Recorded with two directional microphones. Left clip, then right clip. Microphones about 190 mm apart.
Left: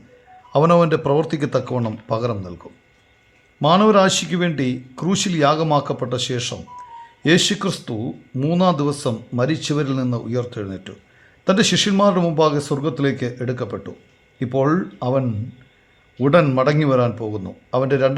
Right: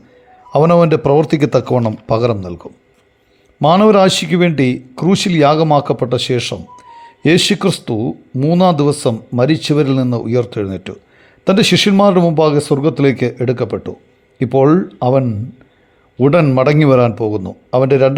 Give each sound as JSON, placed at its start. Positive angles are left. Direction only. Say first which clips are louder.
{"t": 0.5, "sound": "a man's voice", "louder": "right 5 dB", "side_deg": -25}